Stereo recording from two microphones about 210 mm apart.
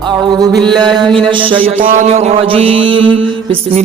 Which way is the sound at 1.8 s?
35° right (ahead or behind).